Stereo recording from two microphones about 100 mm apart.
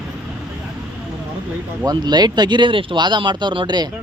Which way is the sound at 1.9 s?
45° right (ahead or behind).